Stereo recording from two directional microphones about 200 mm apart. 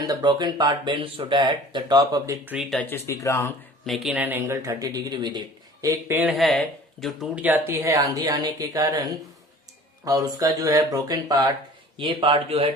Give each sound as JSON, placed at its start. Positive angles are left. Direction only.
{"t": 0.0, "sound": "speech", "side_deg": -20}
{"t": 2.6, "sound": "speech", "side_deg": 5}
{"t": 3.8, "sound": "speech", "side_deg": 0}